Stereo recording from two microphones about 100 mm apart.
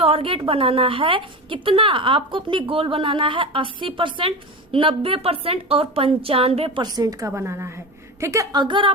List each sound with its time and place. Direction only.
0.0 s a woman's voice: 70° right (ahead or behind)
6.8 s a woman's voice: 40° right (ahead or behind)
8.5 s a woman's voice: 55° right (ahead or behind)